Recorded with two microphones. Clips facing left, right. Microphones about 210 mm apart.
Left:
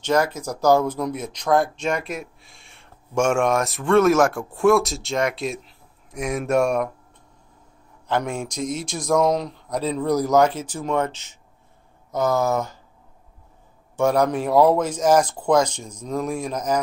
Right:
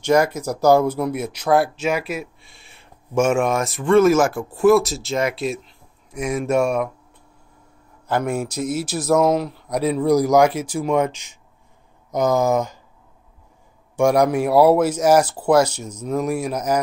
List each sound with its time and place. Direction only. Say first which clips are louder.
0.0 s speech: right 4 dB; 10° right (ahead or behind)
8.1 s speech: right 3 dB; 5° right (ahead or behind)
13.9 s speech: right 3 dB; 10° right (ahead or behind)